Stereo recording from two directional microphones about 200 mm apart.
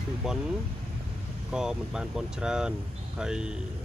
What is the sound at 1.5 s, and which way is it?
Speech, 5° right (ahead or behind).